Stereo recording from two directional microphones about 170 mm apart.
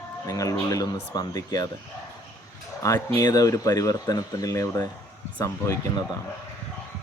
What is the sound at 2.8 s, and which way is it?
Speech, 20° left (ahead or behind).